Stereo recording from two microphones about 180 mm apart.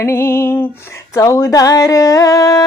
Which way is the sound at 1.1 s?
15° left (ahead or behind).